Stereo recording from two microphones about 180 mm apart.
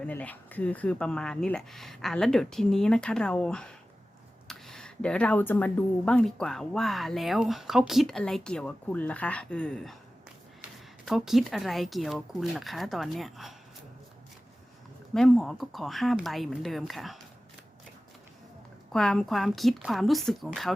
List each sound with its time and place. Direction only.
0.0 s speech: 10° left (ahead or behind)
15.1 s speech: centre (ahead or behind)
18.9 s speech: 5° left (ahead or behind)